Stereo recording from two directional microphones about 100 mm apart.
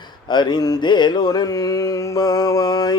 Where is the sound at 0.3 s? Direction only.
45° left (ahead or behind).